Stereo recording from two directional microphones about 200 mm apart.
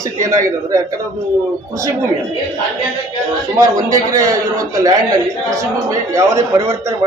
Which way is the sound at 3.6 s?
15° right (ahead or behind).